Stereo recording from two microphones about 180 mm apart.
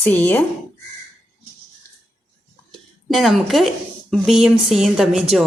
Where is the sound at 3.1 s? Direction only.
Centre (ahead or behind).